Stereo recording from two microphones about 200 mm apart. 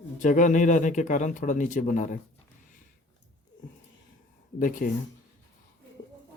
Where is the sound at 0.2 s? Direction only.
40° left (ahead or behind).